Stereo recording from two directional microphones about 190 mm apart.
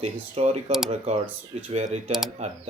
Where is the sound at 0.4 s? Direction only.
30° right (ahead or behind).